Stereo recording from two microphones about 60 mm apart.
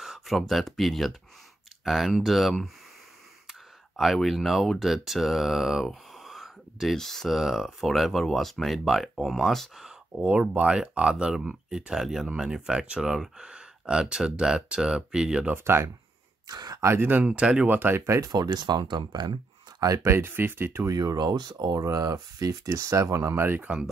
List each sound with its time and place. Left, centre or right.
0.0 s a sound: centre
0.4 s speech: centre
10.5 s speech: centre
15.5 s speech: right
16.4 s a sound: right
16.8 s speech: right
17.1 s speech: centre
17.6 s speech: right
18.2 s speech: right
19.8 s speech: right
20.1 s speech: right
20.9 s speech: right
23.6 s speech: centre